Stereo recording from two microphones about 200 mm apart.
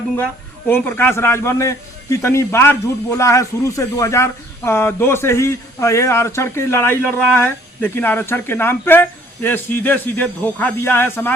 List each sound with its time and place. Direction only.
0.7 s a man's voice: 10° left (ahead or behind)